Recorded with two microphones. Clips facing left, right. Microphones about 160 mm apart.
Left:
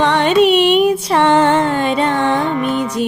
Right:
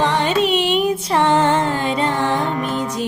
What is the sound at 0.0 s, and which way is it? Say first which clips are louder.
Music: left 5 dB; 65° left (ahead or behind).